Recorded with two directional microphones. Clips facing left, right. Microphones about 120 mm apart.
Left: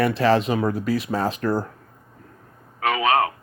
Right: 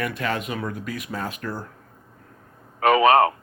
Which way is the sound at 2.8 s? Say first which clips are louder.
Right 4 dB; 45° right (ahead or behind).